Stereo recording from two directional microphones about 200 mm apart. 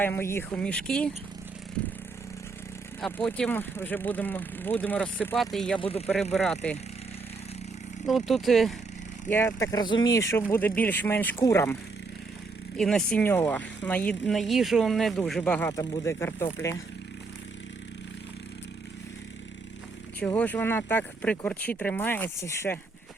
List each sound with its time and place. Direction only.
0.0 s speech: 10° left (ahead or behind)
3.0 s speech: 5° left (ahead or behind)
8.3 s speech: centre (ahead or behind)
9.3 s speech: 10° left (ahead or behind)
20.1 s speech: 5° left (ahead or behind)